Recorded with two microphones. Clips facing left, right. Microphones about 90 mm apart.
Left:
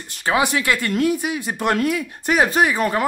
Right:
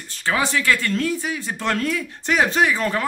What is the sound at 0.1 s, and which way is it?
Speech, 15° left (ahead or behind).